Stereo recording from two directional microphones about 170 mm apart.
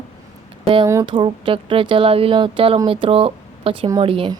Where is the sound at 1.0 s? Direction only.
30° right (ahead or behind).